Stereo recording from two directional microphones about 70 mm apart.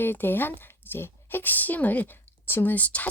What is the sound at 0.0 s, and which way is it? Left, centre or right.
Speech, left.